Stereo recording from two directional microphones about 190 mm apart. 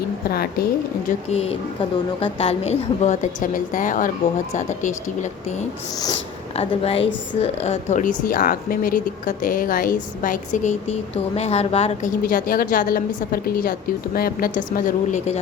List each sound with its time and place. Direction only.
0.3 s speech: 55° left (ahead or behind)
1.3 s a woman's voice: 30° left (ahead or behind)
12.2 s a woman's voice: 50° left (ahead or behind)